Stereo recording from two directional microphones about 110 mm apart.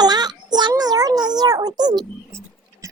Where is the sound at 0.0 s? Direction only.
40° right (ahead or behind).